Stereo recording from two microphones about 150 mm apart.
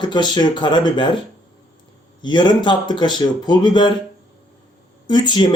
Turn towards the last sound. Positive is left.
turn(degrees=30)  # may be behind; listen again after turning